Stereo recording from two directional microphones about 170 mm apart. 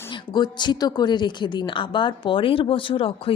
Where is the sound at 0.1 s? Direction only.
25° left (ahead or behind).